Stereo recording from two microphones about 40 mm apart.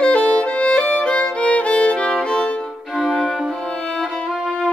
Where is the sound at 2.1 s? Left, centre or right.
Left.